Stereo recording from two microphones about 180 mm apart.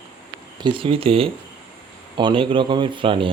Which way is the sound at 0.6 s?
30° right (ahead or behind).